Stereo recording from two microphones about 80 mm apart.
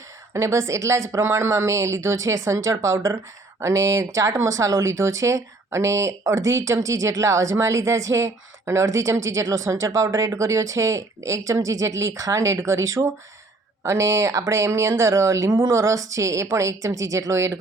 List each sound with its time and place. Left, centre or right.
0.3 s speech: right